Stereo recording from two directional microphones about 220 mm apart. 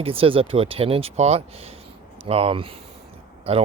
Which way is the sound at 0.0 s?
25° right (ahead or behind).